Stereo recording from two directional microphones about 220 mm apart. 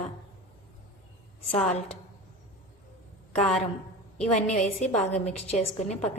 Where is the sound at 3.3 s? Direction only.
30° left (ahead or behind).